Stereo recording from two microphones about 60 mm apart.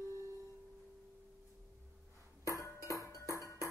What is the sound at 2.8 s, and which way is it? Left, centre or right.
Music, left.